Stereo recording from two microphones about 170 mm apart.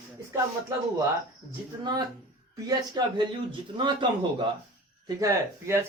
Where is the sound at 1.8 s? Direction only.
25° right (ahead or behind).